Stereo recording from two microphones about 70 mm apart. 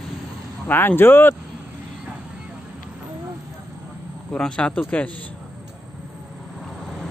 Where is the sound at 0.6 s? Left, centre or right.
Left.